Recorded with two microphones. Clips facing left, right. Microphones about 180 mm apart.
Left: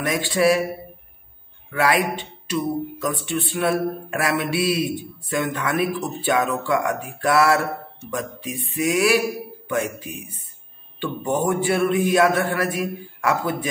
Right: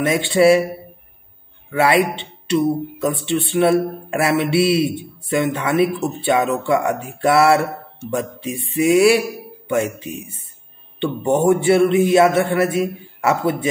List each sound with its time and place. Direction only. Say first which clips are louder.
0.0 s speech: right 5 dB; 25° right (ahead or behind)
1.7 s speech: right 4 dB; 20° right (ahead or behind)